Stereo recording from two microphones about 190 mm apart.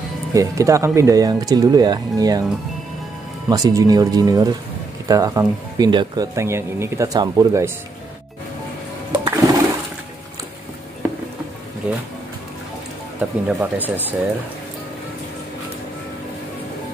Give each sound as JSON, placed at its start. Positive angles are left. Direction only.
{"t": 0.3, "sound": "speech", "side_deg": -15}
{"t": 3.4, "sound": "speech", "side_deg": -20}
{"t": 9.1, "sound": "a sound", "side_deg": -20}
{"t": 13.2, "sound": "speech", "side_deg": -10}